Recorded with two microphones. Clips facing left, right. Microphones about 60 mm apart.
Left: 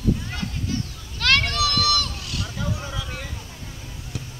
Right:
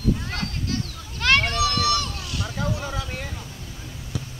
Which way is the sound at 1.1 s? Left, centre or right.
Centre.